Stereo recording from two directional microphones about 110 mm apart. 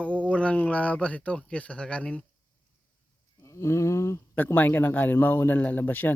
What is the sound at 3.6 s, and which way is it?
Speech, 25° left (ahead or behind).